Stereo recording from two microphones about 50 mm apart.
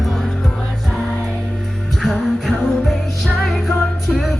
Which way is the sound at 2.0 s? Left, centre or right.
Centre.